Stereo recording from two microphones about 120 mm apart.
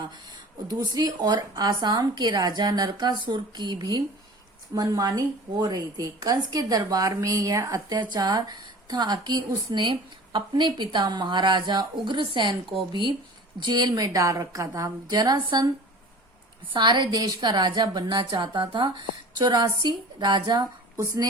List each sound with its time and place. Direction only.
0.7 s a woman's voice: 35° right (ahead or behind)
16.7 s a woman's voice: 40° right (ahead or behind)
21.0 s a woman's voice: 25° right (ahead or behind)